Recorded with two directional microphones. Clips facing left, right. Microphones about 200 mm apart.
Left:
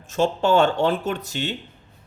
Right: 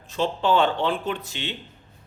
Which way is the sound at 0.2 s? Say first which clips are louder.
Left 3 dB; 45° left (ahead or behind).